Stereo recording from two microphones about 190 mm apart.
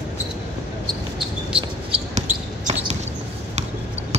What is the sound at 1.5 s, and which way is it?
Basketball bounce, 5° right (ahead or behind).